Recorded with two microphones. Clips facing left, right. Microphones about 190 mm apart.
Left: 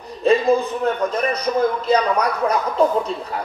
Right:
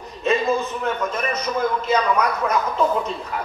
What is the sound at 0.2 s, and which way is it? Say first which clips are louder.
A man's voice: left 5 dB; 35° left (ahead or behind).